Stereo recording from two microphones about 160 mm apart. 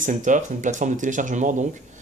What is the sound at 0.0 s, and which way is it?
Speech, 50° right (ahead or behind).